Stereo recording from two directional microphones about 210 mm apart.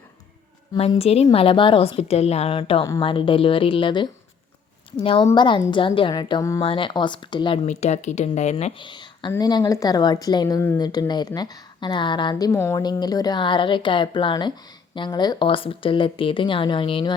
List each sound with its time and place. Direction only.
0.8 s a woman's voice: 30° left (ahead or behind)